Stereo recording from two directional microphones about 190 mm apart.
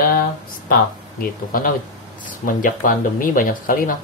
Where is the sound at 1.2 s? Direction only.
45° left (ahead or behind).